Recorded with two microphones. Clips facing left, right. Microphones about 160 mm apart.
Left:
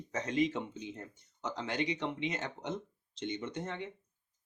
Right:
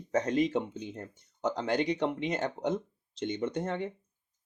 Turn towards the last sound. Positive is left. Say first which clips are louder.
# right 7 dB
turn(degrees=-45)  # may be behind; listen again after turning